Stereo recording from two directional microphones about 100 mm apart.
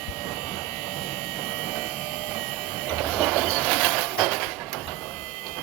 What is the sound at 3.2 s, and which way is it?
Train, centre (ahead or behind).